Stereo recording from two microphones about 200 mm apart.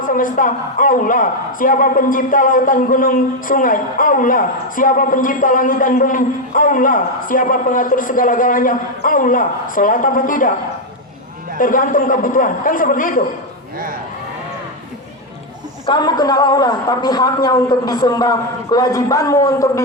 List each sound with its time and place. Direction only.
0.0 s a man's voice: 40° left (ahead or behind)
11.6 s a man's voice: 40° left (ahead or behind)
13.7 s speech: 45° right (ahead or behind)
15.9 s a man's voice: 20° left (ahead or behind)